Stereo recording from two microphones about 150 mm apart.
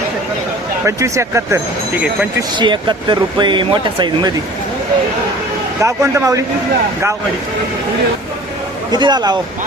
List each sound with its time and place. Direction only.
0.9 s speech: 20° right (ahead or behind)
2.6 s speech: 30° right (ahead or behind)
5.8 s speech: 20° right (ahead or behind)
8.9 s speech: 30° right (ahead or behind)